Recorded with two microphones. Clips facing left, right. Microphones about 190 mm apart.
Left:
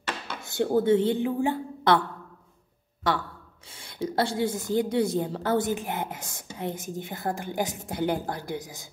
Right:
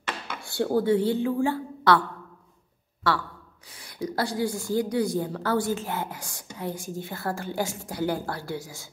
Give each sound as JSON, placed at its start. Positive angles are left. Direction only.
{"t": 0.4, "sound": "a woman's voice", "side_deg": 20}
{"t": 3.1, "sound": "a woman's voice", "side_deg": 20}